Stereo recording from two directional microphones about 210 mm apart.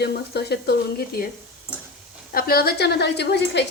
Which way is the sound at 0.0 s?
50° left (ahead or behind).